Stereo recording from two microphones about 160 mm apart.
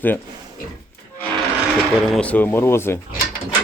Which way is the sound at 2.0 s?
5° left (ahead or behind).